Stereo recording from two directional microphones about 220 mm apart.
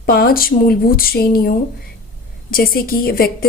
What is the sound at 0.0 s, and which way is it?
A woman's voice, 45° left (ahead or behind).